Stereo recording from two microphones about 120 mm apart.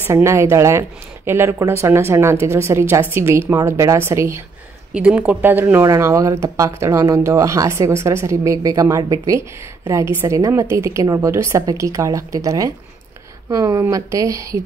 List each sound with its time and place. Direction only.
0.0 s speech: 20° right (ahead or behind)
4.9 s speech: 10° right (ahead or behind)
5.9 s speech: 25° right (ahead or behind)